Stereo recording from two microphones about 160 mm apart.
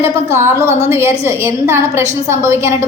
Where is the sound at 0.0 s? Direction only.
15° right (ahead or behind).